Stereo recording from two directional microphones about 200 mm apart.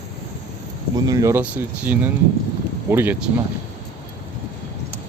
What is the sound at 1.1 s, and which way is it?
Speech, 15° right (ahead or behind).